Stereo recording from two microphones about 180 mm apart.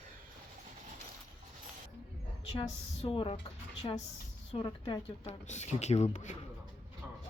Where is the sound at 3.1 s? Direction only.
30° left (ahead or behind).